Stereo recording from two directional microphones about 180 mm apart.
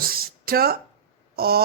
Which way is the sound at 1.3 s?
60° right (ahead or behind).